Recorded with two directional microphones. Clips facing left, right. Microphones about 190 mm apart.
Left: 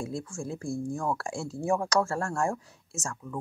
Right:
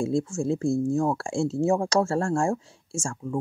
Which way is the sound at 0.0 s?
25° right (ahead or behind).